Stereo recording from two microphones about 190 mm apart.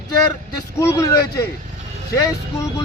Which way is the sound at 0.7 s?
15° left (ahead or behind).